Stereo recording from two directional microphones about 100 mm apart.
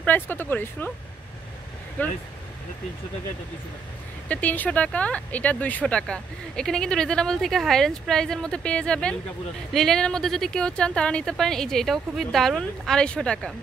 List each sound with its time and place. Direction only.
0.0 s speech: 20° left (ahead or behind)
2.0 s speech: 15° left (ahead or behind)
4.3 s speech: 15° left (ahead or behind)